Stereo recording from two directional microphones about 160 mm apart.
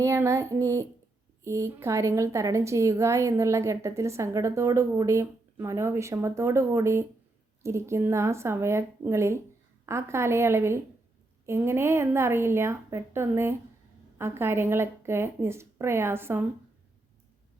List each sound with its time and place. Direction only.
0.0 s child singing: 20° right (ahead or behind)
1.5 s a woman's voice: 20° right (ahead or behind)